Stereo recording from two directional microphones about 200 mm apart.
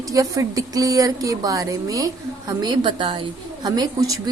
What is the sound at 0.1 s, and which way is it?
A woman's voice, 15° right (ahead or behind).